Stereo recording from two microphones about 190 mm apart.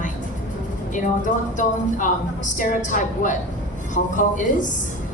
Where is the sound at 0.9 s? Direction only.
40° left (ahead or behind).